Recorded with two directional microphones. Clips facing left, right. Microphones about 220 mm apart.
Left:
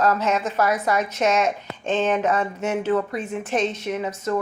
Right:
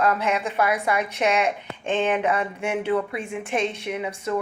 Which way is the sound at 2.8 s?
45° left (ahead or behind).